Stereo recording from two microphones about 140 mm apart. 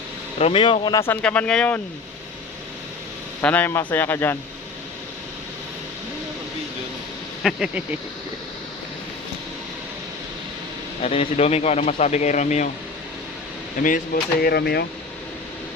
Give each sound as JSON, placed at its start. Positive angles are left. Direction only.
{"t": 0.3, "sound": "speech", "side_deg": 45}
{"t": 0.9, "sound": "speech", "side_deg": 15}
{"t": 3.4, "sound": "speech", "side_deg": 10}
{"t": 7.4, "sound": "speech", "side_deg": -5}
{"t": 11.0, "sound": "speech", "side_deg": 45}
{"t": 13.8, "sound": "speech", "side_deg": 85}